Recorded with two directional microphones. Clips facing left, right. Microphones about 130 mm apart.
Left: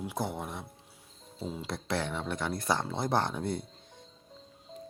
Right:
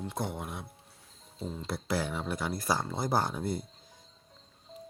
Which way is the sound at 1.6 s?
5° right (ahead or behind).